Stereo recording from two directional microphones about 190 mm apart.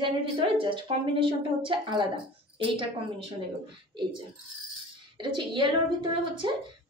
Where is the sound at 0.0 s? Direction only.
25° right (ahead or behind).